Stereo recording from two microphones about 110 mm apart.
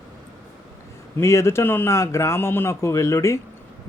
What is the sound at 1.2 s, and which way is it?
Speech, 25° left (ahead or behind).